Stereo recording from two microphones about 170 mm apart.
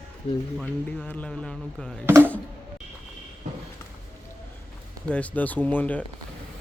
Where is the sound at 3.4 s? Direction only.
50° right (ahead or behind).